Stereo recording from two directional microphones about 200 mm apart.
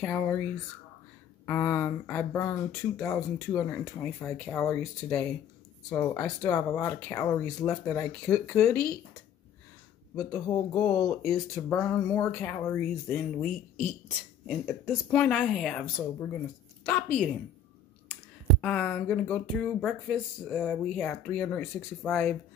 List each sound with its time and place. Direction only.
0.0 s speech: 10° left (ahead or behind)
1.4 s speech: 10° left (ahead or behind)
10.1 s a woman's voice: 15° left (ahead or behind)
18.6 s speech: 5° left (ahead or behind)